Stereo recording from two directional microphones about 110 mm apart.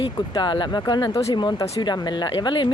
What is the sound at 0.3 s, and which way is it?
Speech, 45° left (ahead or behind).